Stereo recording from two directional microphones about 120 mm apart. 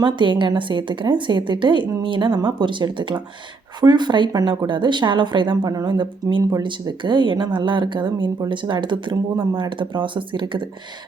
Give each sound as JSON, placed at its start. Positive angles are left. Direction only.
{"t": 0.0, "sound": "a woman's voice", "side_deg": -40}